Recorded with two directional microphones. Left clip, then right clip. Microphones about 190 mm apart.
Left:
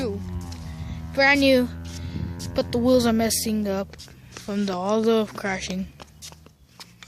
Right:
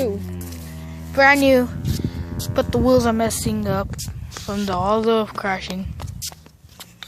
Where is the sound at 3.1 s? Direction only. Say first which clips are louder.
Right 3 dB; 25° left (ahead or behind).